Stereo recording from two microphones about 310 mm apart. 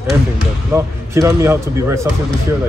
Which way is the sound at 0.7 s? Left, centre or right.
Centre.